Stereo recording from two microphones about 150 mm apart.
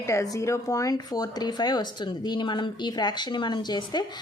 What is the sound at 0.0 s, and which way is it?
Speech, 20° left (ahead or behind).